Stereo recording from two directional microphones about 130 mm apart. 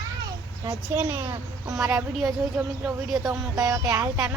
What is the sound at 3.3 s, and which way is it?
Music, 30° right (ahead or behind).